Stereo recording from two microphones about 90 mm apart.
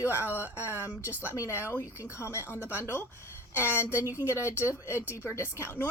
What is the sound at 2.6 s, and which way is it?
Speech, 20° right (ahead or behind).